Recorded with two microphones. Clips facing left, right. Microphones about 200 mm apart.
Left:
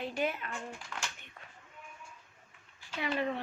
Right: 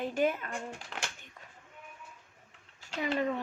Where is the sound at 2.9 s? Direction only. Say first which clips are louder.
Right 2 dB; 45° right (ahead or behind).